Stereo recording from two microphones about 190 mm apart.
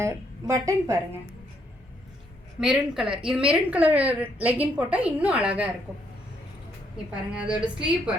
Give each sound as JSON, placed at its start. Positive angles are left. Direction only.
{"t": 0.0, "sound": "a woman's voice", "side_deg": -15}
{"t": 2.6, "sound": "a woman's voice", "side_deg": -5}
{"t": 6.9, "sound": "a woman's voice", "side_deg": -5}